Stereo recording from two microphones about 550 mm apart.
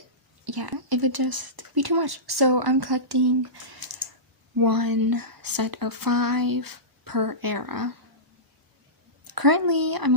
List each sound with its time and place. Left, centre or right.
0.4 s speech: right
9.2 s speech: right